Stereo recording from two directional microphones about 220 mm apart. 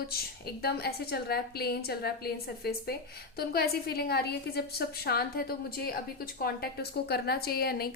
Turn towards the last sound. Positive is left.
turn(degrees=45)  # may be behind; listen again after turning